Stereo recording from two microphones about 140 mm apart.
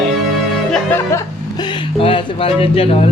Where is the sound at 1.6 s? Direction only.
35° left (ahead or behind).